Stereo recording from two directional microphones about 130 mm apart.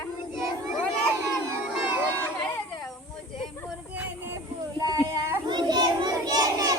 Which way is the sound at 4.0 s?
15° right (ahead or behind).